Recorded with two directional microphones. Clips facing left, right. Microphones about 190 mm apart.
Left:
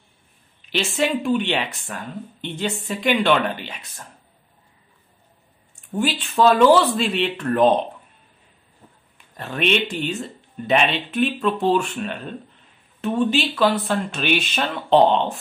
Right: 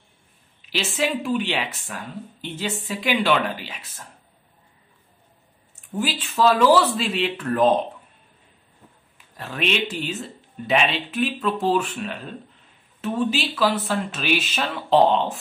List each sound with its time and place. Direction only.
0.7 s speech: centre (ahead or behind)
5.9 s speech: centre (ahead or behind)
9.4 s speech: centre (ahead or behind)